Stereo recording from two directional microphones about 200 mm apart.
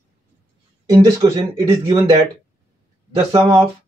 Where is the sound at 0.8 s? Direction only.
15° right (ahead or behind).